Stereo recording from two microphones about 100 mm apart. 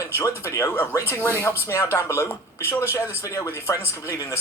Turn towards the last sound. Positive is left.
turn(degrees=25)  # may be behind; listen again after turning